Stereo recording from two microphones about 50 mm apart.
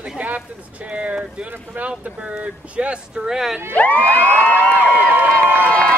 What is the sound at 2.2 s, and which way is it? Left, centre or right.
Speech, right.